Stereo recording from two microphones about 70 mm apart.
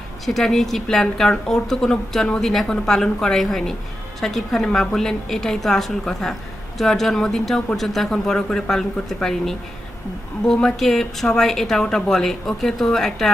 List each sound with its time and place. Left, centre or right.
0.3 s a woman's voice: centre